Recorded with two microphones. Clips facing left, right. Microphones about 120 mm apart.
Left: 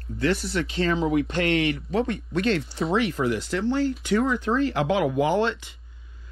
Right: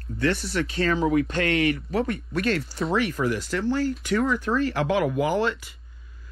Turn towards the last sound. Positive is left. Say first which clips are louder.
# left 1 dB
turn(degrees=25)  # may be behind; listen again after turning